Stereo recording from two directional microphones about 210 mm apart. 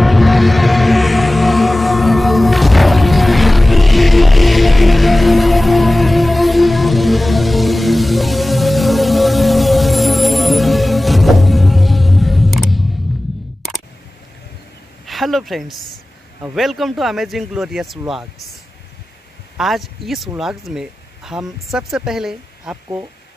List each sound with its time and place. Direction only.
0.0 s music: centre (ahead or behind)
15.0 s a sound: centre (ahead or behind)
16.5 s speech: centre (ahead or behind)
19.5 s speech: centre (ahead or behind)